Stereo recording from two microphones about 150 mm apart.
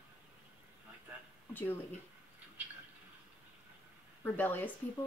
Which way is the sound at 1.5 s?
10° left (ahead or behind).